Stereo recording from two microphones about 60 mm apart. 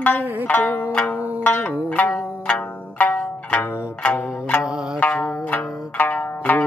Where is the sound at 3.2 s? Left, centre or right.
Centre.